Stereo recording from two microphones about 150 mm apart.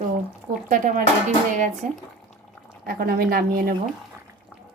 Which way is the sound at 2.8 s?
90° right.